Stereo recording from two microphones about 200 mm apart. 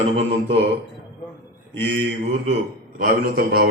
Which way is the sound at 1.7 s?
60° right (ahead or behind).